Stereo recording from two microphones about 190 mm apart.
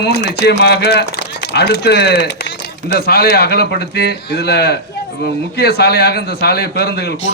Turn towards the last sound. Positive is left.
turn(degrees=60)  # may be behind; listen again after turning